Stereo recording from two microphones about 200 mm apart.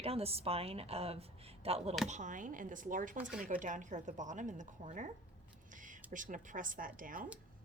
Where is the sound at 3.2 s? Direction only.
5° right (ahead or behind).